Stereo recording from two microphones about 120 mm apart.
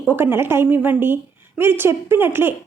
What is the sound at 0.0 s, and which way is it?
A woman's voice, 15° right (ahead or behind).